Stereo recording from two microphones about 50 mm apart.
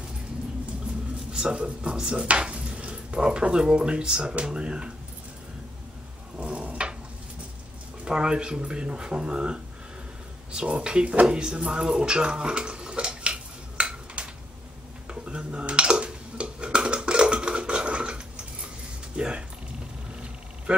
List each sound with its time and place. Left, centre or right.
1.3 s speech: centre
6.3 s cat: right
8.0 s speech: centre
15.0 s a sound: right
19.1 s music: right